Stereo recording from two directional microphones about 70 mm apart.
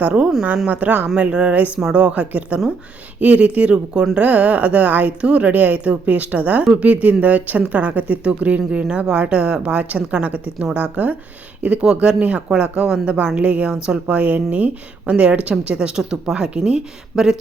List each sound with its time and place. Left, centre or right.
0.0 s a woman's voice: right